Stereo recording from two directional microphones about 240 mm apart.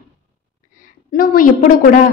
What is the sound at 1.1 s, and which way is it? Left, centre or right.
Speech, left.